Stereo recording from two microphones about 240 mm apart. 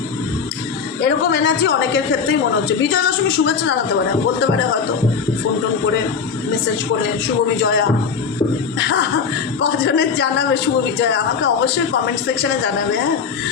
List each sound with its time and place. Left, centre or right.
1.0 s a man's voice: left
7.6 s a man's voice: left